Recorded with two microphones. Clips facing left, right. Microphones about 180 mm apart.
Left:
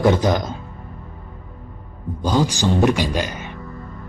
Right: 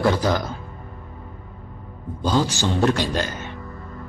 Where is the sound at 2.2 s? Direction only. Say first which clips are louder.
Left 2 dB; 15° left (ahead or behind).